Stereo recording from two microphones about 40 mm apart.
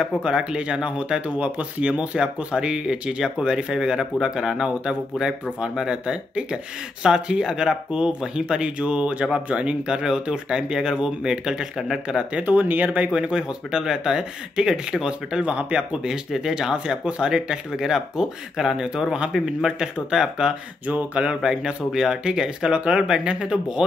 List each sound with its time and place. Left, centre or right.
0.0 s speech: right
1.9 s speech: right
9.8 s speech: right
12.4 s speech: right
13.1 s speech: right
15.4 s speech: right
16.1 s speech: centre
20.8 s speech: right
21.4 s speech: centre